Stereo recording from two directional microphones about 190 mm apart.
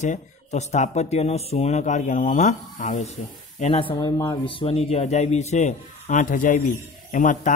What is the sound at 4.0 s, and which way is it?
Speech, 20° left (ahead or behind).